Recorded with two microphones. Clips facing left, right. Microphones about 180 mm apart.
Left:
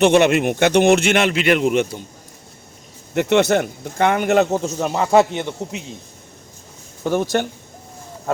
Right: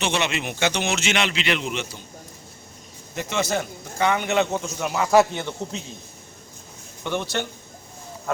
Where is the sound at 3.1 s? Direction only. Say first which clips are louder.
Left 10 dB; 65° left (ahead or behind); by 5.9 s 15° left (ahead or behind).